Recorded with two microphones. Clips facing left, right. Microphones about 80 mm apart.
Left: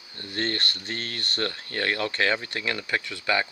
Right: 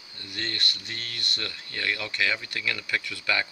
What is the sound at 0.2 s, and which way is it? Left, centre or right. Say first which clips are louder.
Speech: left 5 dB; left.